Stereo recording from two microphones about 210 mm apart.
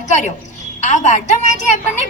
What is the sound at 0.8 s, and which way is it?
Speech, 35° left (ahead or behind).